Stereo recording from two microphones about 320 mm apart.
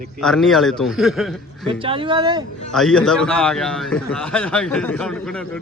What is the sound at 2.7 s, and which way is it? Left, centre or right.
A man's voice, centre.